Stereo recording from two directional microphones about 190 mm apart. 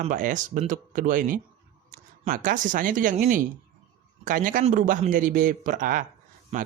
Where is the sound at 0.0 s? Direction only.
45° right (ahead or behind).